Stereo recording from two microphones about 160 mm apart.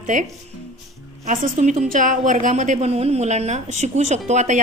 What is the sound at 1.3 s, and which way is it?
A woman's voice, 50° right (ahead or behind).